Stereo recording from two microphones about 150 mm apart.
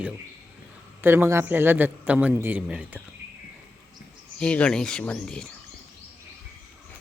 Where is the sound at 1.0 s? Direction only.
15° right (ahead or behind).